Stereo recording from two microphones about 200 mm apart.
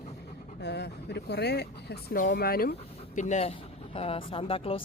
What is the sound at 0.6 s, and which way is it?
Speech, 60° left (ahead or behind).